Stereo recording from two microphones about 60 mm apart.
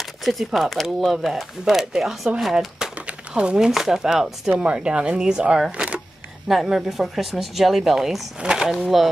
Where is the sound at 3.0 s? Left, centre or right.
Centre.